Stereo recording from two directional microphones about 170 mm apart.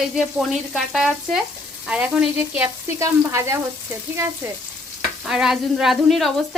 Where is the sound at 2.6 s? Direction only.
15° right (ahead or behind).